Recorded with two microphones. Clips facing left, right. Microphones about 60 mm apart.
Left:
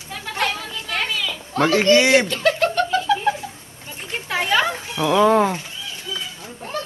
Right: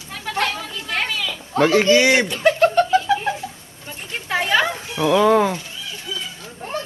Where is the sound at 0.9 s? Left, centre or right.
Right.